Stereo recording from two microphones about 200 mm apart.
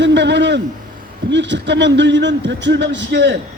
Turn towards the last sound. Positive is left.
turn(degrees=-60)  # may be behind; listen again after turning